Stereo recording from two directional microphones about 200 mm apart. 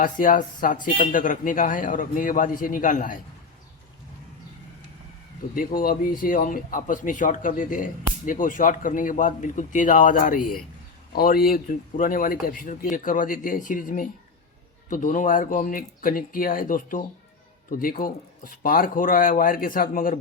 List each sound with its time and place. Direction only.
0.0 s speech: 40° left (ahead or behind)
5.5 s speech: 45° left (ahead or behind)